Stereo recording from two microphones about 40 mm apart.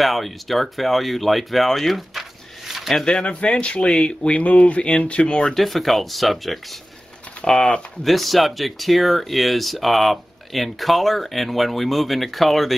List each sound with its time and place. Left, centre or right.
0.0 s speech: centre
3.0 s speech: centre
3.3 s speech: left
5.5 s speech: centre